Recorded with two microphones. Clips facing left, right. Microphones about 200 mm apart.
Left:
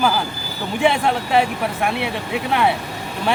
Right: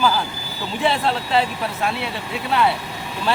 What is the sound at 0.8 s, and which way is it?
Speech, 15° left (ahead or behind).